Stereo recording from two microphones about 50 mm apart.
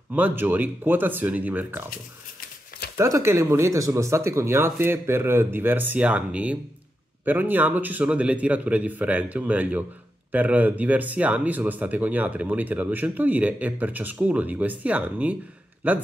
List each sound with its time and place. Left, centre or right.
0.1 s speech: right
3.0 s speech: right
7.2 s speech: right
8.0 s speech: right